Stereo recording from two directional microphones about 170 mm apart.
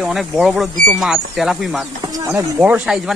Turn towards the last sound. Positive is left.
turn(degrees=-5)  # may be behind; listen again after turning